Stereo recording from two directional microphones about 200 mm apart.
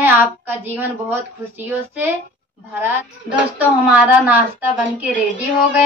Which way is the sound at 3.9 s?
10° right (ahead or behind).